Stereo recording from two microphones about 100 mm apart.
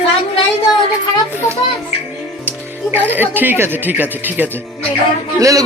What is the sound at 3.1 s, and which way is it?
Speech, 20° right (ahead or behind).